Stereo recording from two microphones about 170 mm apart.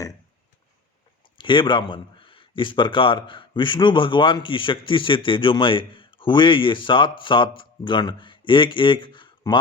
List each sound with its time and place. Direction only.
1.4 s speech: 30° left (ahead or behind)